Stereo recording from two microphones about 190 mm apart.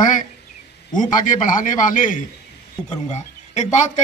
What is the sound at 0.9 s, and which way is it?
A man's voice, 45° left (ahead or behind).